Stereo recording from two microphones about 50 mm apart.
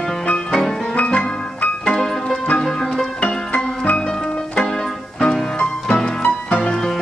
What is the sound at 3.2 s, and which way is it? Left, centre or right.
Music, left.